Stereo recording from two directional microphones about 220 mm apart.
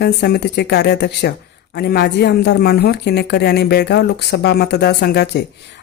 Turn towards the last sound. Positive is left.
turn(degrees=50)  # may be behind; listen again after turning